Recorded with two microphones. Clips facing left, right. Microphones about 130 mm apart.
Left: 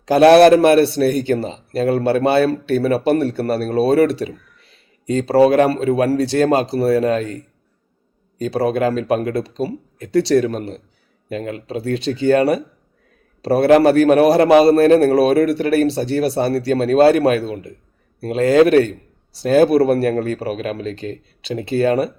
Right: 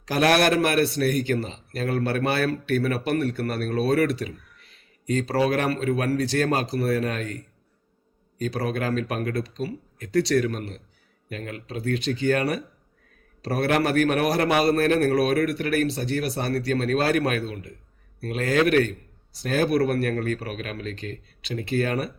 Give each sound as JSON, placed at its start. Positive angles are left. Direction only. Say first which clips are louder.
{"t": 0.0, "sound": "a man's voice", "louder": "left 12 dB", "side_deg": 30}